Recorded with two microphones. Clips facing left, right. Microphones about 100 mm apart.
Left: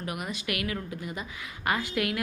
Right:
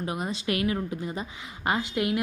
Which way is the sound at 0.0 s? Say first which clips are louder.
Right 4 dB; 25° right (ahead or behind).